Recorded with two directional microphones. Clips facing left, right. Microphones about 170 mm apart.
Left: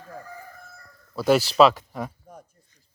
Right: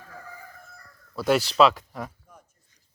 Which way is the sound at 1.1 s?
Centre (ahead or behind).